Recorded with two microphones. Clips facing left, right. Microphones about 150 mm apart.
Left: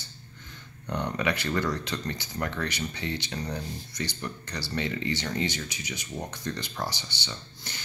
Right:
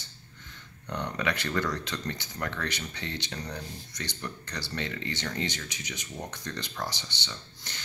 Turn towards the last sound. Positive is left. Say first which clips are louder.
# left 2 dB
turn(degrees=5)  # may be behind; listen again after turning